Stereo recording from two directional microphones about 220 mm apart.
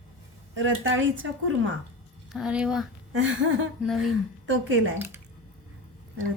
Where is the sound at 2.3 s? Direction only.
5° right (ahead or behind).